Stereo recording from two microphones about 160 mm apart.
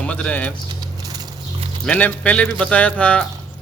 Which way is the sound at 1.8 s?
5° left (ahead or behind).